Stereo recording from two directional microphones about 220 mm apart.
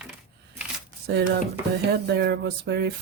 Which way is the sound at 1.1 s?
50° right (ahead or behind).